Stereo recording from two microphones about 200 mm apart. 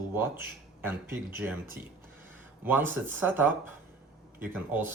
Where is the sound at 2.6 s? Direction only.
10° right (ahead or behind).